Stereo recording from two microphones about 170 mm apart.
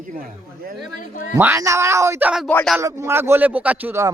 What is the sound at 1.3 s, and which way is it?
A man's voice, 15° right (ahead or behind).